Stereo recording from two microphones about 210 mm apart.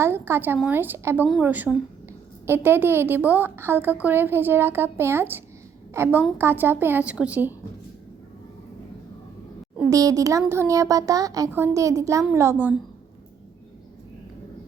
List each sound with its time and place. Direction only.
0.0 s a woman's voice: 10° right (ahead or behind)
9.7 s a child's voice: 15° right (ahead or behind)